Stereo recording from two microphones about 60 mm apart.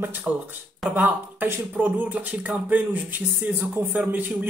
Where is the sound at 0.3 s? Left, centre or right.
Right.